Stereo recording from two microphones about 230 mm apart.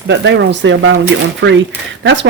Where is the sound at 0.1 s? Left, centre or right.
Right.